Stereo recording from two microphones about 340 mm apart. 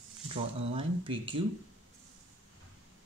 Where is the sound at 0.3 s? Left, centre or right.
Centre.